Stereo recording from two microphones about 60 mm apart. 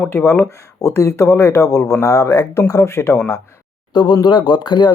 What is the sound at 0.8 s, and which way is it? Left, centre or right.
Speech, left.